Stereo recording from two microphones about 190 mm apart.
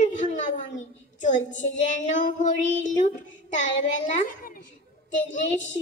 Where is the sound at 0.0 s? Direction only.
40° left (ahead or behind).